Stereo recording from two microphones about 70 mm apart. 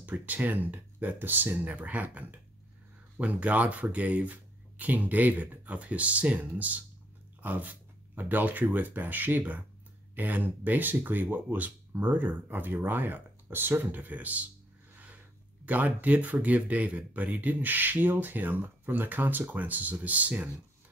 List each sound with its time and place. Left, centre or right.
0.0 s speech: right
15.6 s speech: right